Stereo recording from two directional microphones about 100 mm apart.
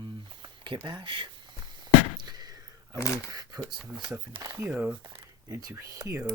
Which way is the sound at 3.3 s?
40° right (ahead or behind).